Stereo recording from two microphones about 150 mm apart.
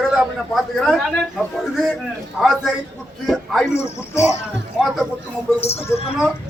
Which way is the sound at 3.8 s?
20° left (ahead or behind).